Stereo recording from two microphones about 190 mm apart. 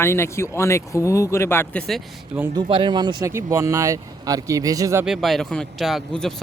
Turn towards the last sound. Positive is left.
turn(degrees=0)  # may be behind; listen again after turning